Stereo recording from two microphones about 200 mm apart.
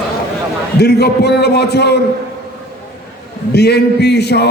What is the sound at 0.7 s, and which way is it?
A man's voice, 55° left (ahead or behind).